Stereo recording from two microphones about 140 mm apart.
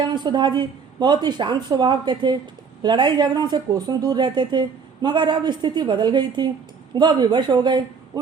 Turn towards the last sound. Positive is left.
turn(degrees=-30)  # may be behind; listen again after turning